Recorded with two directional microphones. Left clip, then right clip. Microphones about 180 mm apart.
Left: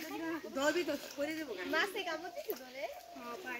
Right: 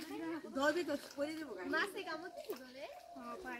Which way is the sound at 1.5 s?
60° right (ahead or behind).